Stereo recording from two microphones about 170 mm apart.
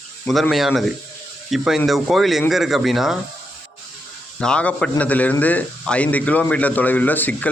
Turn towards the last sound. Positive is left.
turn(degrees=10)  # may be behind; listen again after turning